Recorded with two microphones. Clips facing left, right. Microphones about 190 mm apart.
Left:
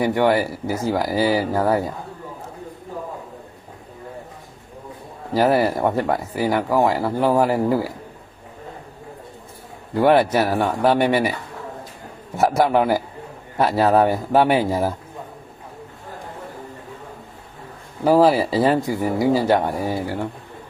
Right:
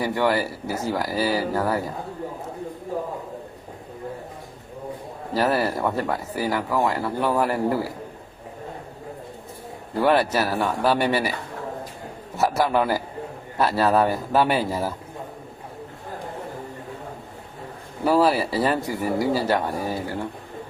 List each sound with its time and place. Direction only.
0.0 s speech: 20° left (ahead or behind)
5.3 s speech: 25° left (ahead or behind)
10.0 s speech: 20° left (ahead or behind)
12.4 s speech: 25° left (ahead or behind)
18.0 s speech: 20° left (ahead or behind)